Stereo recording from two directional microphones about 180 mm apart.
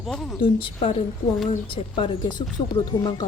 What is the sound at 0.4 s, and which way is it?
A woman's voice, 30° left (ahead or behind).